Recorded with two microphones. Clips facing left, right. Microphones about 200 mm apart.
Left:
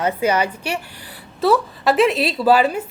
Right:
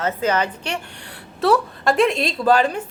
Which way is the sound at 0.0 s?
10° left (ahead or behind).